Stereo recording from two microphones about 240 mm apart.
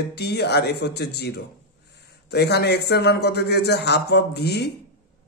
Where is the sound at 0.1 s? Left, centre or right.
Left.